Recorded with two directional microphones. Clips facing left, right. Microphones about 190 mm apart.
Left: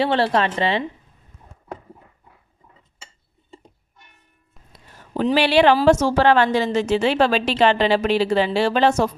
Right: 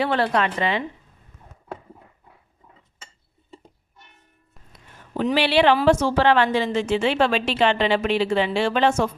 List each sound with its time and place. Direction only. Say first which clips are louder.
0.0 s a woman's voice: left 2 dB; 30° left (ahead or behind)
4.7 s a sound: left 2 dB; 40° left (ahead or behind)
5.8 s a woman's voice: left 2 dB; 40° left (ahead or behind)